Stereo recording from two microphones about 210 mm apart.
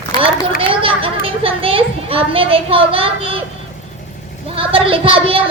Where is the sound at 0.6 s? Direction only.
25° right (ahead or behind).